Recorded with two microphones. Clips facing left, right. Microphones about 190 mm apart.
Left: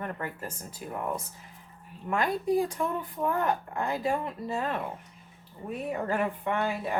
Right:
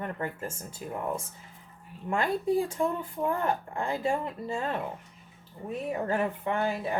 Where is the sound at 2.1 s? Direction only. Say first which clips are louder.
Even; 30° right (ahead or behind).